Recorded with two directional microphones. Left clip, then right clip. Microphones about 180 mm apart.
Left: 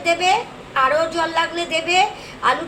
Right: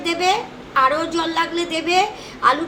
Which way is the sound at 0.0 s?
20° right (ahead or behind).